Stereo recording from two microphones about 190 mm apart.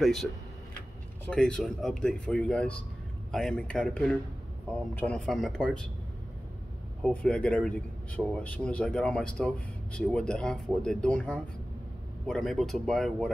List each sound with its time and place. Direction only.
0.0 s speech: centre (ahead or behind)
7.1 s speech: 5° left (ahead or behind)